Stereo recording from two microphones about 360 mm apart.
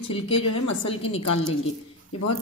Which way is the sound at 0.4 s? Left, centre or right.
Left.